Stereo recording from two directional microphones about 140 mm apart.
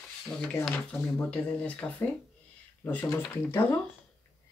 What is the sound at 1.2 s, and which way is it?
Speech, 10° left (ahead or behind).